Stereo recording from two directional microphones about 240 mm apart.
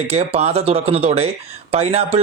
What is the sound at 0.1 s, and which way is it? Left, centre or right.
A man's voice, right.